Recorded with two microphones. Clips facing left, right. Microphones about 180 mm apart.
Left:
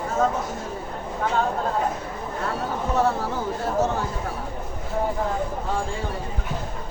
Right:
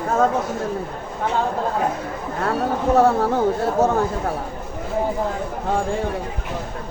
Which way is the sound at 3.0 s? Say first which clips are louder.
Right 7 dB; 55° right (ahead or behind).